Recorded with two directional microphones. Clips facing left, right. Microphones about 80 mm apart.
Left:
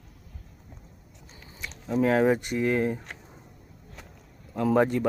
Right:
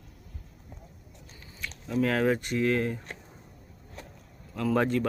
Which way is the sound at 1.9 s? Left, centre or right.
Centre.